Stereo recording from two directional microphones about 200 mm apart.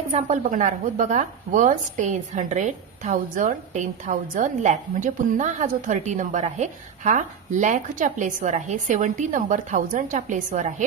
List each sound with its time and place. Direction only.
0.1 s speech: 35° right (ahead or behind)